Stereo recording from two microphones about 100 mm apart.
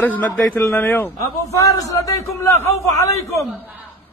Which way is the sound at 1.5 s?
30° left (ahead or behind).